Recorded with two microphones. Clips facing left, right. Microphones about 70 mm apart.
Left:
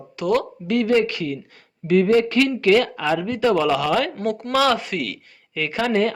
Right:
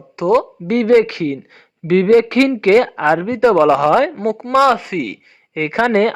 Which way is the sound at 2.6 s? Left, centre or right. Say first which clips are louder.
Right 6 dB; right.